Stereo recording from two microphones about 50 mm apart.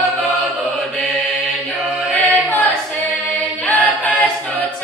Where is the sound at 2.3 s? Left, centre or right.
Left.